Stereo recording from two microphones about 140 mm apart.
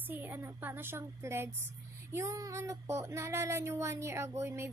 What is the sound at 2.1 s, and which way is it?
Child singing, 20° right (ahead or behind).